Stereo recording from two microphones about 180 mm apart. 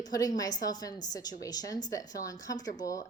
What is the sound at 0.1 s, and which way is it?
A woman's voice, 20° left (ahead or behind).